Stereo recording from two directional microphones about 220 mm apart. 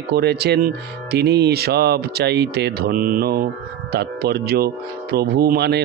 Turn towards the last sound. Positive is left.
turn(degrees=-45)  # may be behind; listen again after turning